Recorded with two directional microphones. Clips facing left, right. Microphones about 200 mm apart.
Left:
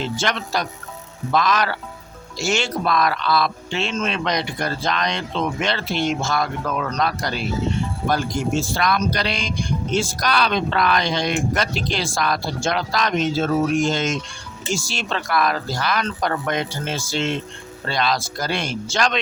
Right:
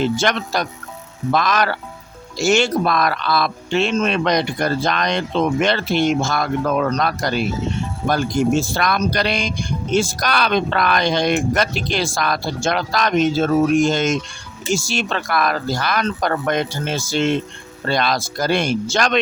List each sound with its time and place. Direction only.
0.0 s speech: 50° right (ahead or behind)
8.7 s speech: 50° right (ahead or behind)